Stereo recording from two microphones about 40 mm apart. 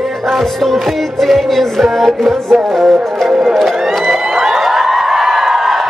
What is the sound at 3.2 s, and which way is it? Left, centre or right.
Music, centre.